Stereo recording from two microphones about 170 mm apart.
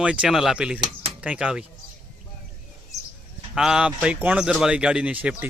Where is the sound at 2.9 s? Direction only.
15° left (ahead or behind).